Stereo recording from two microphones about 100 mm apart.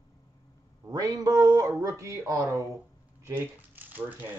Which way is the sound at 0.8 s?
40° right (ahead or behind).